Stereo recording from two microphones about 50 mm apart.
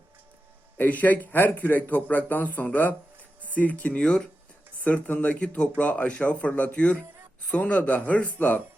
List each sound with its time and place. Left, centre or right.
0.8 s speech: left
7.5 s speech: left